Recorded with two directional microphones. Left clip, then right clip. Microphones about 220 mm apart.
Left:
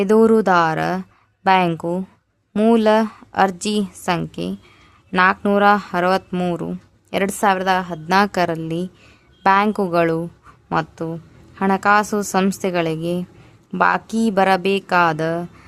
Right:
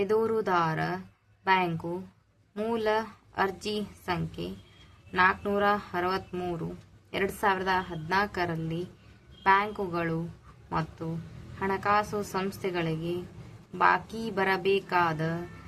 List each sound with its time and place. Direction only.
0.0 s a woman's voice: 50° left (ahead or behind)